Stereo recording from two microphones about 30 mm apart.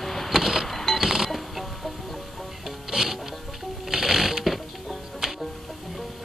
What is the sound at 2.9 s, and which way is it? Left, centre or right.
Music, centre.